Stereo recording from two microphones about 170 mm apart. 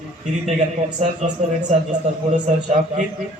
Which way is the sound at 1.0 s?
45° right (ahead or behind).